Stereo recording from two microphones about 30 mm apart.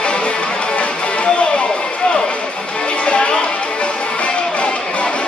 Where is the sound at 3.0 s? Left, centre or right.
Left.